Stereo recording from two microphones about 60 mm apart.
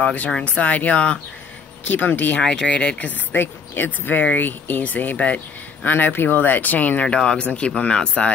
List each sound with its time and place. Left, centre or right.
0.0 s speech: left
1.9 s speech: left
2.4 s speech: centre